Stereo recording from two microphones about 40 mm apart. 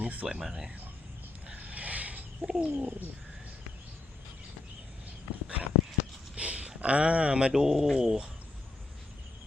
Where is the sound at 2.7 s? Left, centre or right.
Right.